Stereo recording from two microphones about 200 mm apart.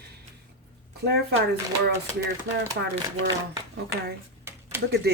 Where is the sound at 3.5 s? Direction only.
55° right (ahead or behind).